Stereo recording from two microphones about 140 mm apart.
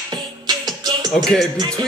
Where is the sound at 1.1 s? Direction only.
Centre (ahead or behind).